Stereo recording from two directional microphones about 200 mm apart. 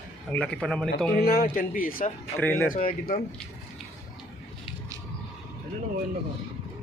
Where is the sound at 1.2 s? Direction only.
50° left (ahead or behind).